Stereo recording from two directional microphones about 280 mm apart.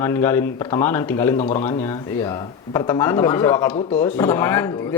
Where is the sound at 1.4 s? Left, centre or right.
Left.